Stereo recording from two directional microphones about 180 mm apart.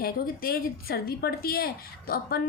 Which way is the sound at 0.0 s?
55° left (ahead or behind).